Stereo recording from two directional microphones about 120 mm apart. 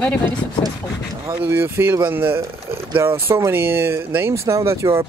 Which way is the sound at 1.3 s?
20° right (ahead or behind).